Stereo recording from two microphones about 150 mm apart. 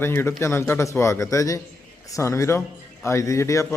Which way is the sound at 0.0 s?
15° left (ahead or behind).